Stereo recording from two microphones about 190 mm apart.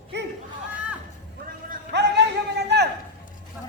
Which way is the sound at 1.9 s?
65° right (ahead or behind).